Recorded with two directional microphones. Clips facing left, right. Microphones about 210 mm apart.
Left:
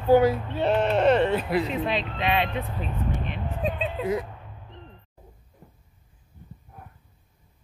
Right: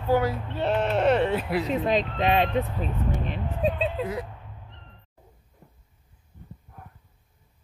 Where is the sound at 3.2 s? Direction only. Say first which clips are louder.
Right 3 dB; 35° right (ahead or behind).